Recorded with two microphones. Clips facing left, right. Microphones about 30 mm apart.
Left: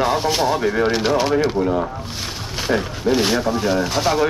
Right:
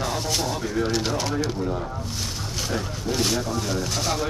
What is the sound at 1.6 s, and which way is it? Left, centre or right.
Speech, left.